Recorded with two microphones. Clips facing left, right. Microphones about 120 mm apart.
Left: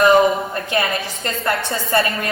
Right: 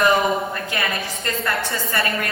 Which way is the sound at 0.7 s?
25° left (ahead or behind).